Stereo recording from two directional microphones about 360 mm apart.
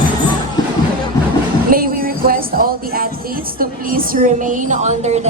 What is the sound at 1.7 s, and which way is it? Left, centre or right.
Speech, right.